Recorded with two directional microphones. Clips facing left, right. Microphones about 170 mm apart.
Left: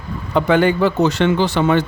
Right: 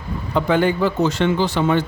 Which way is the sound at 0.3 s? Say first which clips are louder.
Left 3 dB; 75° left (ahead or behind).